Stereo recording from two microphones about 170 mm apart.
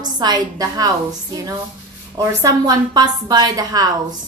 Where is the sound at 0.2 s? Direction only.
20° right (ahead or behind).